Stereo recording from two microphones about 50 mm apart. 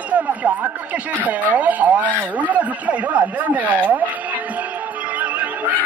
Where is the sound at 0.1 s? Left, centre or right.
Right.